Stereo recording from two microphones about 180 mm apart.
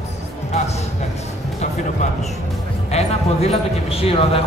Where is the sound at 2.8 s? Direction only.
35° left (ahead or behind).